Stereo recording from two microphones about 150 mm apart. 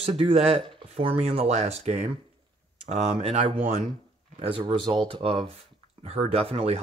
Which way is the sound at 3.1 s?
40° right (ahead or behind).